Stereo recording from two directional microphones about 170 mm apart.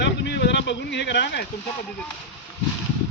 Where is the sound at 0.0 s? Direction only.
85° left.